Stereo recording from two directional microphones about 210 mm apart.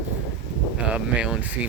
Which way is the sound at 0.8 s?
5° right (ahead or behind).